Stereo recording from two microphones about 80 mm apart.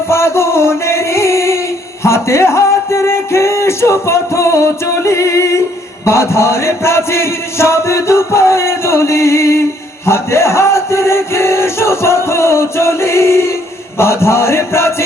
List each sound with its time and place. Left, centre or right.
0.1 s music: left
2.0 s a sound: left
6.1 s chant: left